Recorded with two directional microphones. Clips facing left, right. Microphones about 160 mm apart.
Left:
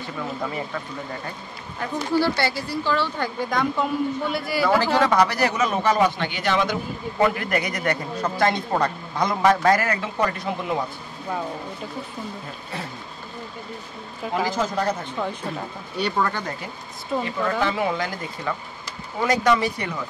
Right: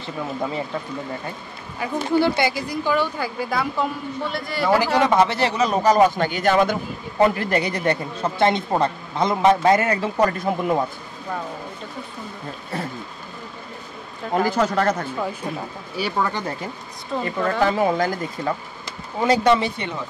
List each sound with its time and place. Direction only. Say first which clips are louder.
0.0 s speech: right 2 dB; 25° right (ahead or behind)
2.0 s a man's voice: right 3 dB; 20° right (ahead or behind); by 4.7 s 5° left (ahead or behind)
4.7 s speech: right 2 dB; 15° right (ahead or behind); by 6.8 s 50° right (ahead or behind)
7.2 s speech: right 3 dB; 35° right (ahead or behind)
10.1 s speech: right 4 dB; 45° right (ahead or behind)
14.3 s speech: right 4 dB; 60° right (ahead or behind); by 15.0 s 85° right
15.0 s speech: right 1 dB; 5° right (ahead or behind)
17.2 s speech: right 4 dB; 40° right (ahead or behind)
18.9 s speech: right 3 dB; 30° right (ahead or behind)